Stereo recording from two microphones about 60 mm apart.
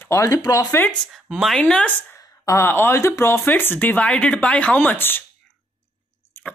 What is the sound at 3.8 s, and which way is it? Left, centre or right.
Speech, centre.